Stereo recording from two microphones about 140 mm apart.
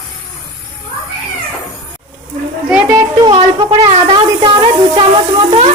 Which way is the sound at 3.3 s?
45° right (ahead or behind).